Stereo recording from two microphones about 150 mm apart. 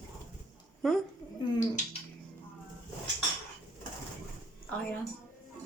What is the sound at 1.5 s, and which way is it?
Speech, 55° left (ahead or behind).